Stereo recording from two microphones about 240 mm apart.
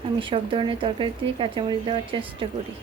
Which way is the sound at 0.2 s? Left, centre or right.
Right.